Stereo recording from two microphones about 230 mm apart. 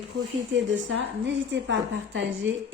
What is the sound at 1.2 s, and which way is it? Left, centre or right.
A woman's voice, right.